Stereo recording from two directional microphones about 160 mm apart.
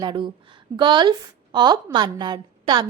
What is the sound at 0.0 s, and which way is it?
A woman's voice, 30° right (ahead or behind).